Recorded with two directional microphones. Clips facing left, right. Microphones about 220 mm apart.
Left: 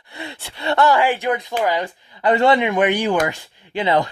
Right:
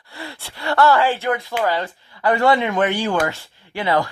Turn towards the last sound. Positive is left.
turn(degrees=20)  # may be behind; listen again after turning